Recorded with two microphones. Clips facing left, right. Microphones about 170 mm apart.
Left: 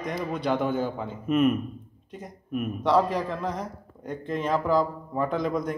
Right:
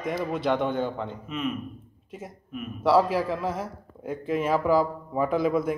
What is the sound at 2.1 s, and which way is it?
A man's voice, 5° right (ahead or behind).